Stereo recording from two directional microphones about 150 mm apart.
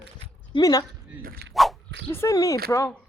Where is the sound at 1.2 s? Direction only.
80° right.